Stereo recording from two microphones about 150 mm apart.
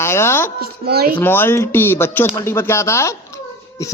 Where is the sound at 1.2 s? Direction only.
15° left (ahead or behind).